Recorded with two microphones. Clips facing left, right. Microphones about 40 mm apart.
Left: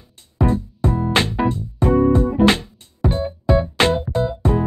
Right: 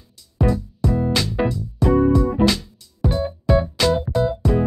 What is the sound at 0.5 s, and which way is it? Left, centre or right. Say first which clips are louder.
Music: even; left.